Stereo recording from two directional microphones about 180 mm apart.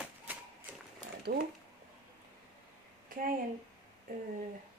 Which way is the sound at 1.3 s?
50° right (ahead or behind).